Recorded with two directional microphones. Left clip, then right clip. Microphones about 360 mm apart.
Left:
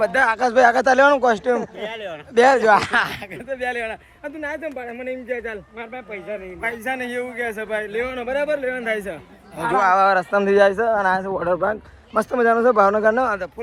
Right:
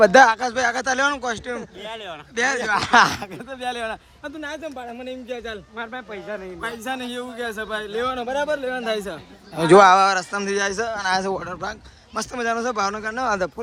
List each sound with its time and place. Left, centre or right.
0.0 s a man's voice: centre
4.6 s speech: right
5.8 s a man's voice: centre